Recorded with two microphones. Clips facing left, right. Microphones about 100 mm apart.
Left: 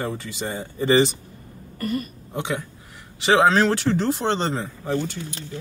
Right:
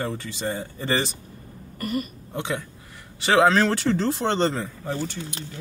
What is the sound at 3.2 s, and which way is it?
Speech, 20° left (ahead or behind).